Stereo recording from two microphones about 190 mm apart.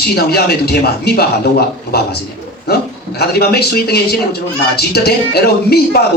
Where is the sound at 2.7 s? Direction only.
55° left (ahead or behind).